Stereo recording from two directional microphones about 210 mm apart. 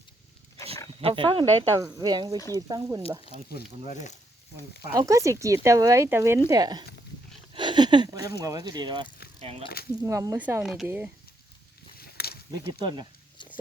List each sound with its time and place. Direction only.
1.0 s speech: 25° right (ahead or behind)
3.5 s speech: 35° left (ahead or behind)
4.9 s speech: 15° right (ahead or behind)
10.0 s speech: 15° right (ahead or behind)
11.9 s a sound: 50° left (ahead or behind)